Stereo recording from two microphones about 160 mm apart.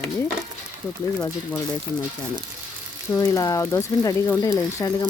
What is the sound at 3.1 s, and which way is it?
Speech, 20° left (ahead or behind).